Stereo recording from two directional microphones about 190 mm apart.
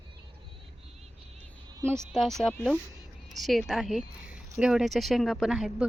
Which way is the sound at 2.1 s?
Centre (ahead or behind).